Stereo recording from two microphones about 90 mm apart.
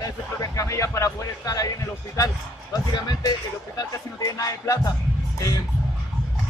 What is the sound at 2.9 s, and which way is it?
Speech, 55° left (ahead or behind).